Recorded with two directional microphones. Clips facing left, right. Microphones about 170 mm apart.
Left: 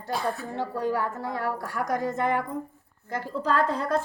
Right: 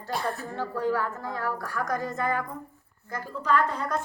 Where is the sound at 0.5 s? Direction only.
20° left (ahead or behind).